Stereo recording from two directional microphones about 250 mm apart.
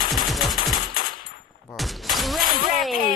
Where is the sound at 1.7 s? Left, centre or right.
Centre.